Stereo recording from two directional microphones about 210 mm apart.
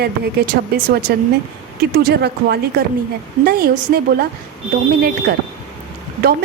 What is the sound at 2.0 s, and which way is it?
A woman's voice, 50° right (ahead or behind).